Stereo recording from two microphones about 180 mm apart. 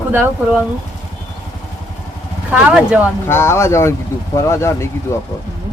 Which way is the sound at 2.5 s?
10° right (ahead or behind).